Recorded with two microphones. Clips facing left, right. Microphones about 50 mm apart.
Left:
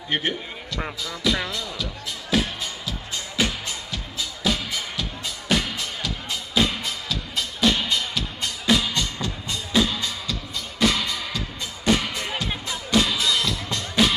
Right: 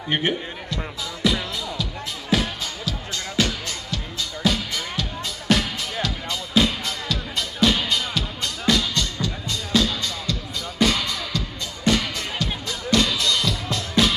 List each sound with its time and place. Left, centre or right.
0.1 s a man's voice: centre
2.3 s music: centre
3.3 s music: centre
8.6 s music: centre